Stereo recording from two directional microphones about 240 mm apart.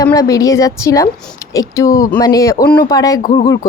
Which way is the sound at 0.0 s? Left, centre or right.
Centre.